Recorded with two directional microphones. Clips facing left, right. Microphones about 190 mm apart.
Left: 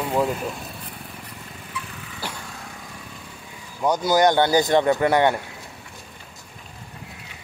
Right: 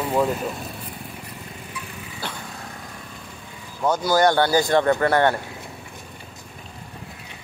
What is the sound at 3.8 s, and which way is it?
Speech, 15° left (ahead or behind).